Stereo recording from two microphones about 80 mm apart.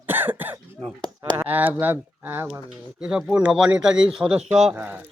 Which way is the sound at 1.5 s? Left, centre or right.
Right.